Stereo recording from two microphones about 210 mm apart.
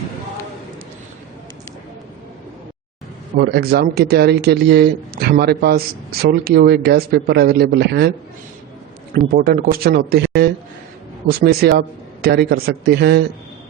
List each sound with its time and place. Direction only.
3.3 s a man's voice: 50° right (ahead or behind)
9.1 s a man's voice: 45° right (ahead or behind)